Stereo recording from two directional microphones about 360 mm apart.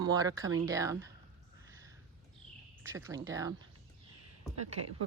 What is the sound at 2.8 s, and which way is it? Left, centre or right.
Speech, centre.